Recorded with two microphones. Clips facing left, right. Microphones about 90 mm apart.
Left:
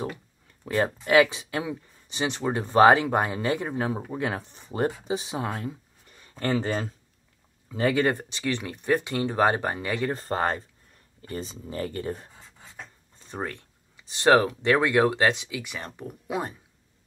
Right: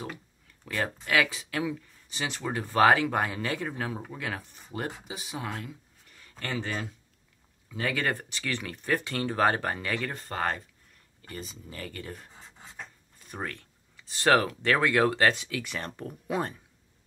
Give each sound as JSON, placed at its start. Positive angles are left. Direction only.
{"t": 0.7, "sound": "speech", "side_deg": 25}
{"t": 6.4, "sound": "speech", "side_deg": 35}
{"t": 10.1, "sound": "speech", "side_deg": 30}